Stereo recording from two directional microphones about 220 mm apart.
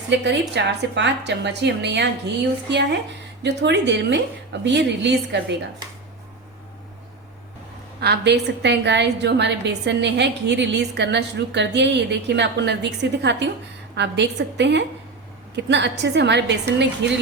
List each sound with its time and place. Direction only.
0.1 s a woman's voice: 50° right (ahead or behind)
3.4 s a woman's voice: 50° right (ahead or behind)
8.0 s a woman's voice: 50° right (ahead or behind)